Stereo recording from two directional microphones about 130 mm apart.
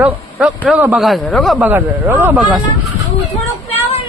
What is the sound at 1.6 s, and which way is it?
Speech, 15° right (ahead or behind).